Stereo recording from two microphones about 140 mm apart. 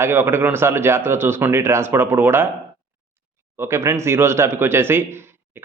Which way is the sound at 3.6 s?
20° right (ahead or behind).